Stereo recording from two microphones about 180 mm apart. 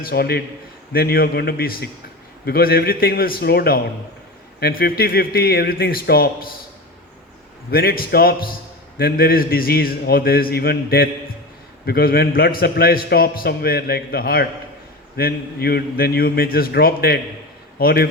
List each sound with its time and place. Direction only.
0.0 s a man's voice: 60° left (ahead or behind)
7.7 s a man's voice: 55° left (ahead or behind)